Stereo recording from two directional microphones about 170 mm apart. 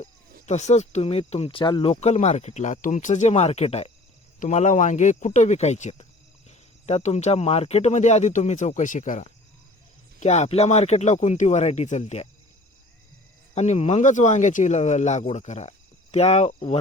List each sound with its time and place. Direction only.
0.4 s speech: 40° left (ahead or behind)
13.5 s speech: 40° left (ahead or behind)